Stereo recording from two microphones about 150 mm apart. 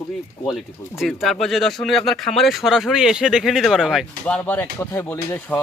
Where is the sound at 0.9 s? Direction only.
Centre (ahead or behind).